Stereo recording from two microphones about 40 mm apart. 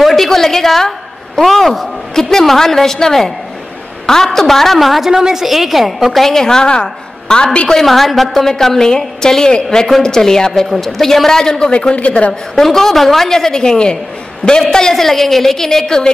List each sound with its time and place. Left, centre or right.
0.0 s a woman's voice: centre
5.1 s a woman's voice: centre
6.2 s a woman's voice: centre
7.6 s a woman's voice: centre
11.9 s a man's voice: left
12.5 s a woman's voice: centre